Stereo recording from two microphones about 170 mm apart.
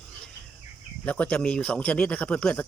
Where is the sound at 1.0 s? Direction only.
10° left (ahead or behind).